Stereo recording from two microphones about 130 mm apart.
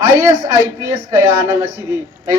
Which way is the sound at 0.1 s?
20° right (ahead or behind).